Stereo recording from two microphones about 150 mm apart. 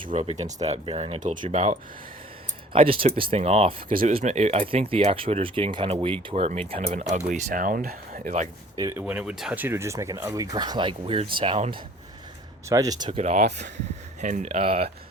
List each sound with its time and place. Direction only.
0.1 s speech: 50° right (ahead or behind)
1.2 s speech: 60° right (ahead or behind)
2.7 s speech: 35° right (ahead or behind); by 8.3 s 70° right (ahead or behind)
8.7 s speech: 25° right (ahead or behind)
9.0 s speech: 10° right (ahead or behind); by 11.8 s 35° right (ahead or behind)
12.6 s speech: 25° right (ahead or behind)
13.1 s speech: 45° right (ahead or behind)
14.6 s speech: 40° right (ahead or behind)